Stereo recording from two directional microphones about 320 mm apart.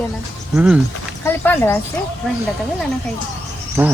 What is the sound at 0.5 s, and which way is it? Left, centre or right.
Speech, centre.